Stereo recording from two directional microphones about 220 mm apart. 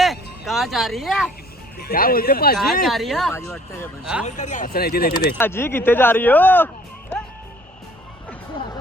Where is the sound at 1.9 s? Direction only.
40° left (ahead or behind).